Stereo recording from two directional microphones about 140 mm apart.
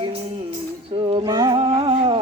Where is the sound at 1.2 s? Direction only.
30° right (ahead or behind).